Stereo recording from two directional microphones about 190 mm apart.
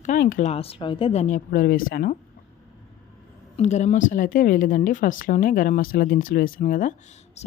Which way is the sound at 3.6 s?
35° left (ahead or behind).